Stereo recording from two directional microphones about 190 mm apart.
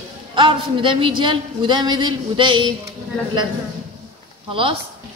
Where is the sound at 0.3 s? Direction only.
25° right (ahead or behind).